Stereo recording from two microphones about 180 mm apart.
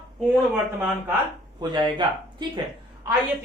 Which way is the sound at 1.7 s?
25° right (ahead or behind).